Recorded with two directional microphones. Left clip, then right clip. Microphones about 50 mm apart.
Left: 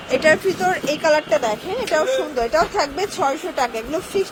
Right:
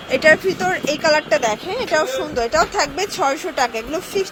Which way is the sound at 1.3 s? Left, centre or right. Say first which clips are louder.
Right 1 dB; right.